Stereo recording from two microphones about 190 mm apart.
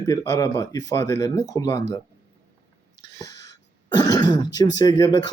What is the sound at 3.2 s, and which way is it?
Throat clearing, 20° left (ahead or behind).